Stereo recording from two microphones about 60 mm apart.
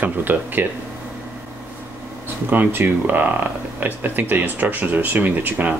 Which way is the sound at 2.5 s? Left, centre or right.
Right.